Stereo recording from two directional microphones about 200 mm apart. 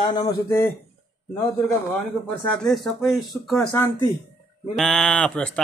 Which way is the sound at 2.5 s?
Centre (ahead or behind).